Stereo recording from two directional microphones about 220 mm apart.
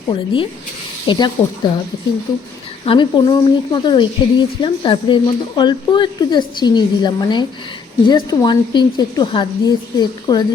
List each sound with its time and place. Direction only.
1.0 s a woman's voice: 20° left (ahead or behind)
2.8 s a woman's voice: 20° left (ahead or behind)